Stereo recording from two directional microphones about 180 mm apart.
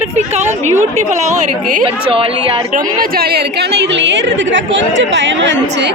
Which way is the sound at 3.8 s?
85° right.